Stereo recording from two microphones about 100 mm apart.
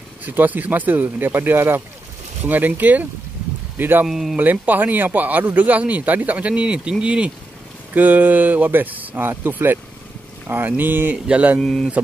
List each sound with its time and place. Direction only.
0.2 s speech: 20° right (ahead or behind)
4.1 s speech: 5° right (ahead or behind)
4.4 s speech: 20° right (ahead or behind)
11.6 s speech: 5° left (ahead or behind)